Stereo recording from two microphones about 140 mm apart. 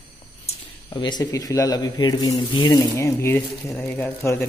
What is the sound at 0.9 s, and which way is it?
Speech, 30° left (ahead or behind).